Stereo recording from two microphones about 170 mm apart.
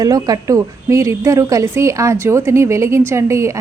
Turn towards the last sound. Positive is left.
turn(degrees=-15)  # may be behind; listen again after turning